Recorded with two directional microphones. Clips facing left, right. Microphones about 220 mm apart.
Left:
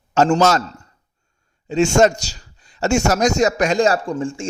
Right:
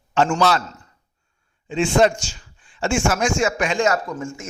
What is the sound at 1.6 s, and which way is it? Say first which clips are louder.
A man's voice: left 3 dB; 40° left (ahead or behind).